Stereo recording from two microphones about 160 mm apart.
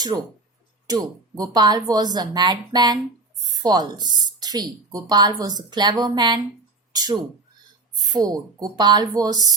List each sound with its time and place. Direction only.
0.1 s speech: 15° right (ahead or behind)